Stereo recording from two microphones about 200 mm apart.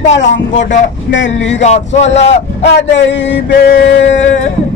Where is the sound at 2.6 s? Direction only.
65° left (ahead or behind).